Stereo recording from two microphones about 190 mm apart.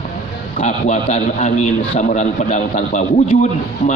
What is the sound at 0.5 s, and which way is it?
A man's voice, 40° left (ahead or behind).